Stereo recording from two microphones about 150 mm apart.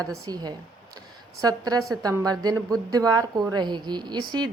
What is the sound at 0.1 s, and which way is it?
A woman's voice, 25° right (ahead or behind).